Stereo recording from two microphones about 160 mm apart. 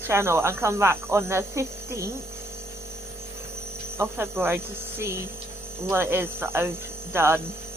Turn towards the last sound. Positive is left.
turn(degrees=-15)  # may be behind; listen again after turning